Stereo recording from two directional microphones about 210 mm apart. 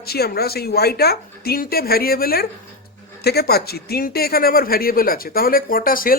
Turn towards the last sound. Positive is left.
turn(degrees=40)  # may be behind; listen again after turning